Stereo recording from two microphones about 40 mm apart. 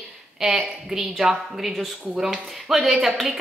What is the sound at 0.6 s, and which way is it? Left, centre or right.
Speech, centre.